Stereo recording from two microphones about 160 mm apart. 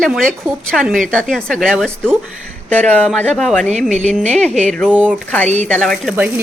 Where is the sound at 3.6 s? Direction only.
45° right (ahead or behind).